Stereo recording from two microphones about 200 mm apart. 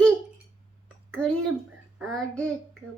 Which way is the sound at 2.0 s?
5° left (ahead or behind).